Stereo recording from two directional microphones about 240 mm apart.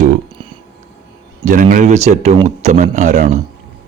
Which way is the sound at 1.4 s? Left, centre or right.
Right.